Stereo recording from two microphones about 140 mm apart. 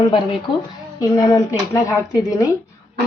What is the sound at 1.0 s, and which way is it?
Speech, 25° left (ahead or behind).